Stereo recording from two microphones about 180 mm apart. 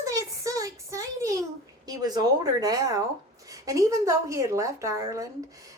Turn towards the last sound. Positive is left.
turn(degrees=-15)  # may be behind; listen again after turning